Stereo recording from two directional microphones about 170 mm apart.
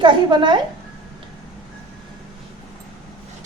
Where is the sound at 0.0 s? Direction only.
30° right (ahead or behind).